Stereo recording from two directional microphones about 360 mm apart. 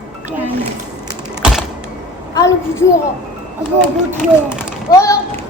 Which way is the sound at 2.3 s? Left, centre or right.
Centre.